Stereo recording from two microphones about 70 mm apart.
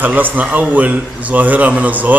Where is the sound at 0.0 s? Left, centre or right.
Right.